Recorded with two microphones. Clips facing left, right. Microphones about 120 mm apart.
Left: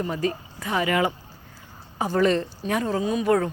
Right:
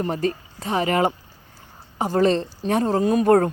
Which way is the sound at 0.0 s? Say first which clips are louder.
Right 2 dB; 40° right (ahead or behind).